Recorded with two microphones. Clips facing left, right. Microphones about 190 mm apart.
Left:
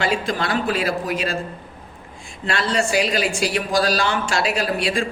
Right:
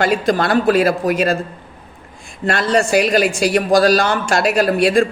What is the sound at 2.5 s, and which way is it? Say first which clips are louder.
Speech: right 6 dB; 50° right (ahead or behind).